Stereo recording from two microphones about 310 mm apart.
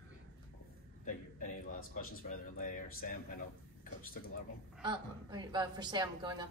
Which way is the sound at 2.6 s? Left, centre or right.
Left.